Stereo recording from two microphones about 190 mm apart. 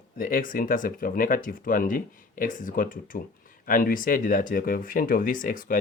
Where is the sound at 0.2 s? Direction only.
45° left (ahead or behind).